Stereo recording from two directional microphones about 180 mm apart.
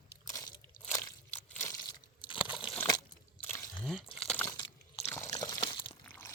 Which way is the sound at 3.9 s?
Centre (ahead or behind).